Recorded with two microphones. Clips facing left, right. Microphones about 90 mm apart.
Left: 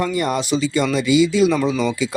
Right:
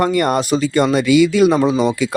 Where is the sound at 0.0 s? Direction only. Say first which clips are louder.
Right 5 dB; 60° right (ahead or behind).